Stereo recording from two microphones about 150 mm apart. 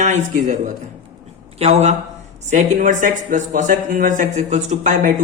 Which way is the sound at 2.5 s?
60° right (ahead or behind).